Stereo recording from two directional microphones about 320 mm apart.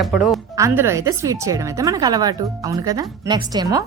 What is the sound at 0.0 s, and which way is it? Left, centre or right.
Speech, centre.